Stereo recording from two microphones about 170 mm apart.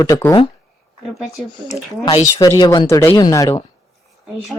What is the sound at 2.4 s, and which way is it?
Speech, 25° left (ahead or behind).